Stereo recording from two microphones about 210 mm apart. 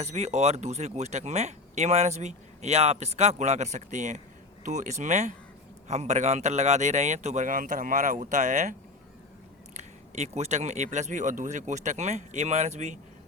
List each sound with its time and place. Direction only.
0.0 s speech: 30° right (ahead or behind)
9.7 s speech: 30° right (ahead or behind)